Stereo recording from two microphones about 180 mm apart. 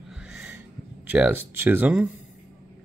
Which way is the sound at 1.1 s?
10° right (ahead or behind).